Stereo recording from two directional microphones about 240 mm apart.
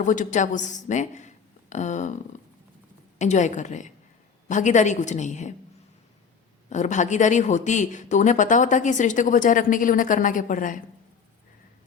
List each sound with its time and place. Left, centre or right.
0.0 s a woman's voice: left
3.2 s a woman's voice: left
6.7 s speech: left